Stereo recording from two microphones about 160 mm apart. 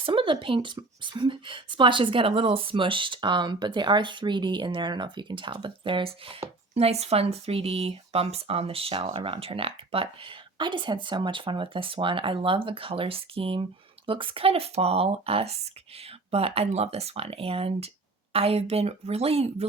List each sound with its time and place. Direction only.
0.0 s speech: 30° right (ahead or behind)